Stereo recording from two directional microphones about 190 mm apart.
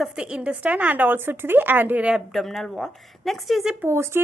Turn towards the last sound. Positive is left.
turn(degrees=-15)  # may be behind; listen again after turning